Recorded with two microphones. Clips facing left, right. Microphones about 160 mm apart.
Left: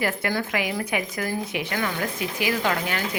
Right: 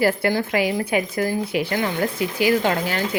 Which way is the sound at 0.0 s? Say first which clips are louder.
Right 6 dB; 30° right (ahead or behind).